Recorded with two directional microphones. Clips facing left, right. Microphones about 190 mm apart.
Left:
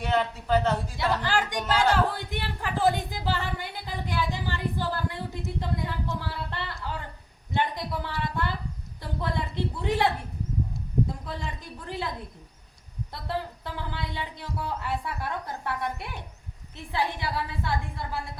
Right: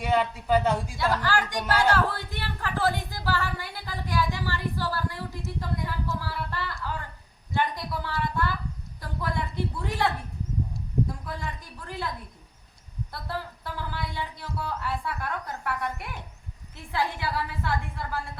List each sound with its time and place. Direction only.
0.0 s a man's voice: 10° right (ahead or behind)
1.2 s a woman's voice: 20° left (ahead or behind)
11.3 s speech: 20° left (ahead or behind)
13.2 s a woman's voice: 20° left (ahead or behind)